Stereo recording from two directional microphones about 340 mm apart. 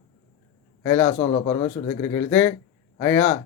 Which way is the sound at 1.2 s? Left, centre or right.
Centre.